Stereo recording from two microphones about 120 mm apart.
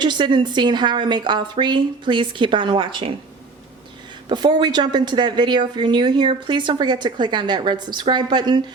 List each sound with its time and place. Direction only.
0.0 s speech: 40° right (ahead or behind)
4.3 s speech: 40° right (ahead or behind)